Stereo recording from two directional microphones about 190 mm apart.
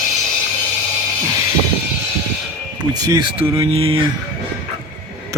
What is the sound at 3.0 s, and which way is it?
Speech, 20° right (ahead or behind).